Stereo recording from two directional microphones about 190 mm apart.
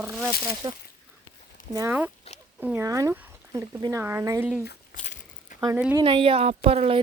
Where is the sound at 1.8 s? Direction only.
10° right (ahead or behind).